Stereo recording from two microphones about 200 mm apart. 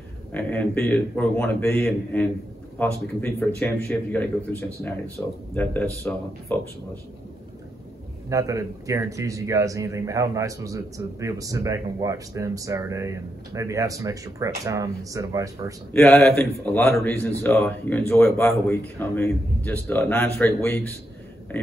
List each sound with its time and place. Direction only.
0.3 s a man's voice: 10° left (ahead or behind)
8.3 s speech: 15° right (ahead or behind)
15.9 s a man's voice: 5° left (ahead or behind)